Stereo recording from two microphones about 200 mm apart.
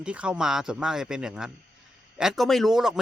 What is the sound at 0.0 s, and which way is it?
A man's voice, 5° right (ahead or behind).